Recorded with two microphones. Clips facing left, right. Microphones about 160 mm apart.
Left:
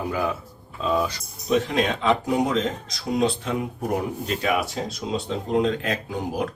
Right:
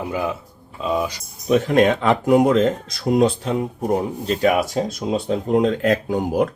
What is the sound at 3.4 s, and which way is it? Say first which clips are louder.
Speech: right 4 dB; 35° right (ahead or behind).